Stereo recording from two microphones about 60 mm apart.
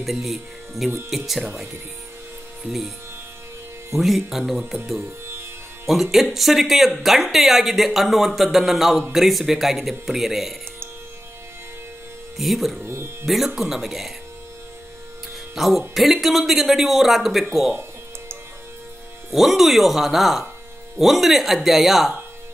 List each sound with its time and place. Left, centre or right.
0.0 s speech: centre
2.6 s speech: centre
3.9 s speech: centre
6.1 s speech: centre
12.4 s speech: centre
12.8 s music: right
13.2 s speech: centre
15.5 s speech: centre
19.3 s speech: centre